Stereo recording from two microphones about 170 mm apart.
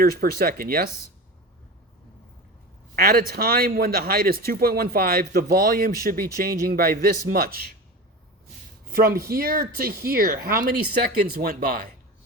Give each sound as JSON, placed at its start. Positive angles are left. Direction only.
{"t": 0.0, "sound": "speech", "side_deg": -65}
{"t": 2.9, "sound": "speech", "side_deg": -60}
{"t": 8.9, "sound": "speech", "side_deg": -60}